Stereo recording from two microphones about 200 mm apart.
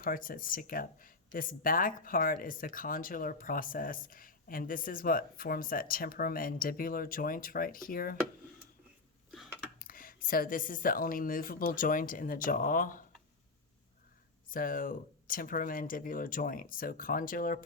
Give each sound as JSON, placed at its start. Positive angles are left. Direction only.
{"t": 0.0, "sound": "speech", "side_deg": 45}
{"t": 9.7, "sound": "speech", "side_deg": 45}
{"t": 14.5, "sound": "speech", "side_deg": 45}